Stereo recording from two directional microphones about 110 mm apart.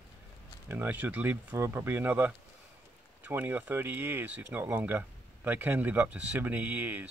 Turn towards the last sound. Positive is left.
turn(degrees=-15)  # may be behind; listen again after turning